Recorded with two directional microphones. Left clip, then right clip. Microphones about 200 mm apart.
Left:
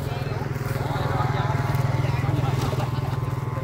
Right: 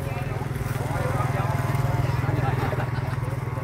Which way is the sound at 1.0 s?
65° right (ahead or behind).